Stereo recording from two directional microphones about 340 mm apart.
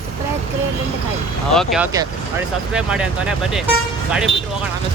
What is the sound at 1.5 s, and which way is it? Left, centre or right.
Speech, centre.